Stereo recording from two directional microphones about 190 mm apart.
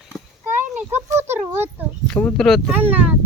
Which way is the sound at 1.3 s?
10° right (ahead or behind).